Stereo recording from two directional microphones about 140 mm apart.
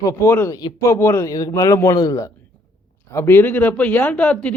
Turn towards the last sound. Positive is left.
turn(degrees=5)  # may be behind; listen again after turning